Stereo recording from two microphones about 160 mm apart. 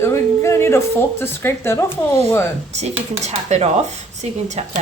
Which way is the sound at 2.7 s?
45° right (ahead or behind).